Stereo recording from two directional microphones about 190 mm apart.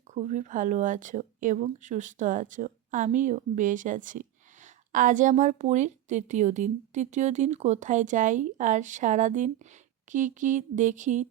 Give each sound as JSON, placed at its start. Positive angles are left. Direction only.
{"t": 0.1, "sound": "speech", "side_deg": -40}